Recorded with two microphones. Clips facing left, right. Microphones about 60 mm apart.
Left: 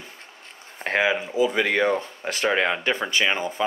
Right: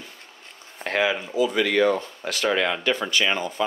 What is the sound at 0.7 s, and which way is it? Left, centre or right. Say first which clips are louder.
Speech: left 1 dB; left.